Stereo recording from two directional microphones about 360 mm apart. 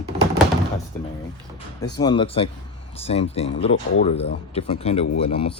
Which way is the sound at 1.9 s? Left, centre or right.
Centre.